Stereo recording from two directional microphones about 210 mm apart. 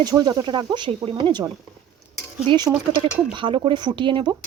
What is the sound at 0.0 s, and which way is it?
Speech, 20° right (ahead or behind).